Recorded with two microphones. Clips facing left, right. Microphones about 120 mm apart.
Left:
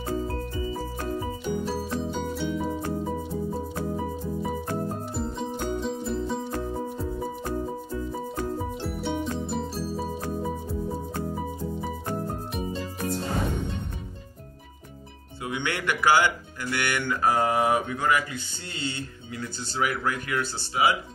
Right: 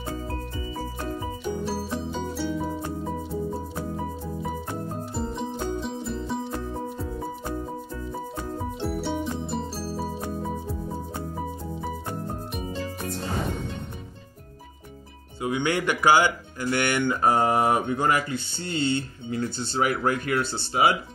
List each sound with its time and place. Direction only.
1.2 s music: 5° right (ahead or behind)
5.1 s music: centre (ahead or behind)
8.8 s music: centre (ahead or behind)
15.4 s a sound: 20° right (ahead or behind)
16.7 s speech: 25° right (ahead or behind)